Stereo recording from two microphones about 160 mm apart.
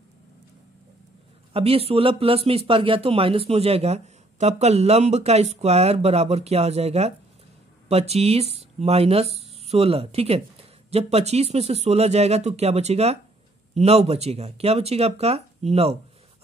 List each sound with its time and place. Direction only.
1.5 s a man's voice: 40° right (ahead or behind)